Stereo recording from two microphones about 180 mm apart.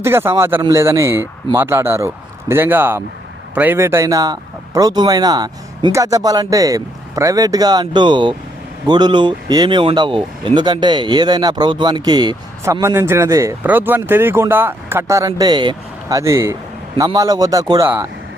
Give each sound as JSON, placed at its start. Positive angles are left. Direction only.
{"t": 0.0, "sound": "a man's voice", "side_deg": -15}